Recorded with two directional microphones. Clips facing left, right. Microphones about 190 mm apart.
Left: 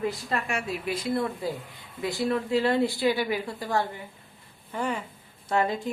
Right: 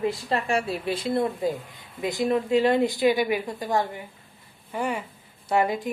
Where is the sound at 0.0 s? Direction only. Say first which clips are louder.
Right 3 dB; 30° right (ahead or behind).